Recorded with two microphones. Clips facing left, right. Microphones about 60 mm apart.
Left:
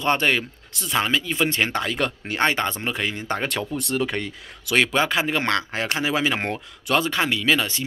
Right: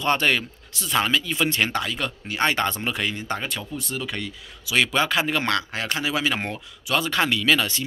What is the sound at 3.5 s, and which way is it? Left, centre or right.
Speech, left.